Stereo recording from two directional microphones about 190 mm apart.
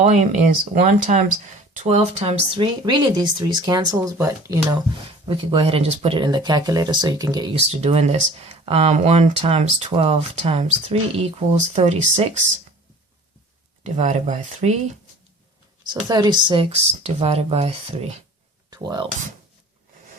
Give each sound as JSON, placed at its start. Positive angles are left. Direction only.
{"t": 0.0, "sound": "speech", "side_deg": -40}
{"t": 5.3, "sound": "speech", "side_deg": -30}
{"t": 7.8, "sound": "speech", "side_deg": -35}
{"t": 13.8, "sound": "speech", "side_deg": -35}
{"t": 15.9, "sound": "speech", "side_deg": -20}
{"t": 18.7, "sound": "speech", "side_deg": -20}